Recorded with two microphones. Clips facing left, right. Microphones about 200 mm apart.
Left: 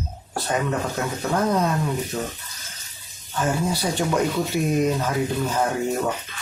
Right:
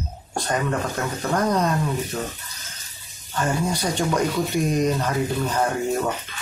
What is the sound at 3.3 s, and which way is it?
Speech, 5° left (ahead or behind).